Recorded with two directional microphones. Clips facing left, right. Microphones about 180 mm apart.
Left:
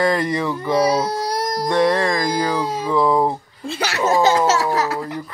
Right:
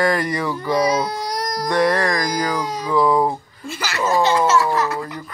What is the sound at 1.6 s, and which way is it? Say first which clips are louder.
Music: left 1 dB; 25° left (ahead or behind).